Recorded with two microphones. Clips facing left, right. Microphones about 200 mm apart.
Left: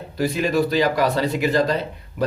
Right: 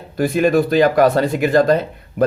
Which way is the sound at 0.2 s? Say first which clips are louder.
Right 5 dB; 50° right (ahead or behind).